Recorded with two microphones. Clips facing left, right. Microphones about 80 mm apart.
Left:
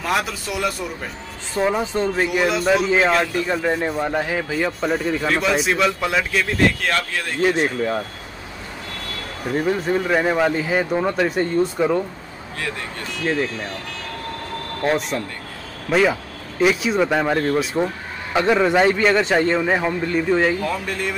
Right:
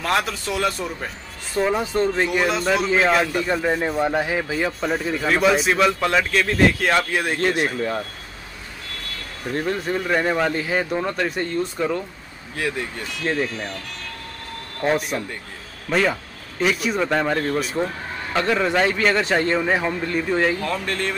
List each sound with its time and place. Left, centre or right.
0.0 s speech: centre
6.9 s speech: centre
7.5 s speech: centre
9.5 s speech: centre
13.2 s speech: centre
14.8 s speech: centre
15.9 s speech: centre
18.3 s speech: centre